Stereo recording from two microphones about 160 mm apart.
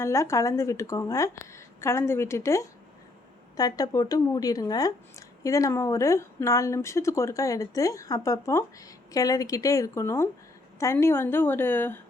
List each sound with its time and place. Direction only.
0.0 s a woman's voice: 15° left (ahead or behind)